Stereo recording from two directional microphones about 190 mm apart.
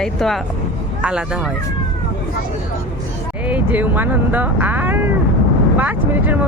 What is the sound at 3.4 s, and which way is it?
Speech, 10° right (ahead or behind).